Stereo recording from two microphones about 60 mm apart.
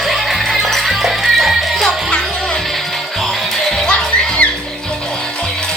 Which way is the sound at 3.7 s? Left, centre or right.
Centre.